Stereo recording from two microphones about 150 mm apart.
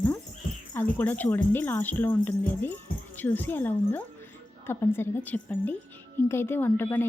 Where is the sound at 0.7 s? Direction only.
15° left (ahead or behind).